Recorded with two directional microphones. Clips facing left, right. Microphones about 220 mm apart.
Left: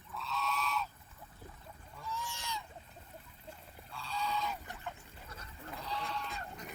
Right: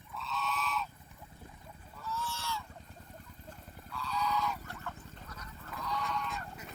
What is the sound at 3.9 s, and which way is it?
Goose, 30° left (ahead or behind).